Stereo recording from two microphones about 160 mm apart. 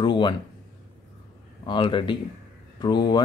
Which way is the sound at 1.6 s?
30° left (ahead or behind).